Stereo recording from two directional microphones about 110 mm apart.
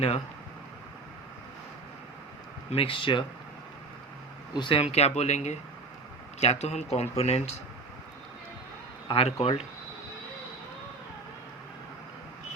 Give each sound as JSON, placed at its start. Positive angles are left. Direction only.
{"t": 2.6, "sound": "speech", "side_deg": 55}
{"t": 4.5, "sound": "speech", "side_deg": 50}
{"t": 9.0, "sound": "a man's voice", "side_deg": 60}